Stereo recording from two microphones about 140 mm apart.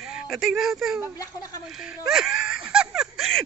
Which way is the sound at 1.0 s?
25° left (ahead or behind).